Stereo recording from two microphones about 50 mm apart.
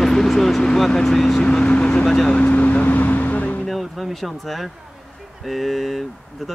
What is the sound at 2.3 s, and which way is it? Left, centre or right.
Vehicle, left.